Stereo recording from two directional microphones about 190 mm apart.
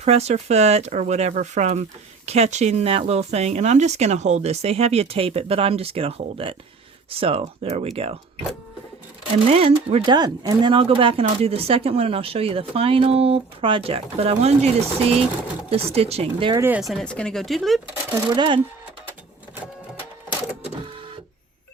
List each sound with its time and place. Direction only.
0.0 s speech: 35° right (ahead or behind)
9.5 s speech: 30° right (ahead or behind)
16.6 s speech: 10° right (ahead or behind)
18.3 s speech: 25° right (ahead or behind)